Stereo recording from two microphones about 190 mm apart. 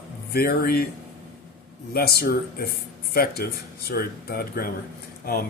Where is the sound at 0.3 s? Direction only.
50° left (ahead or behind).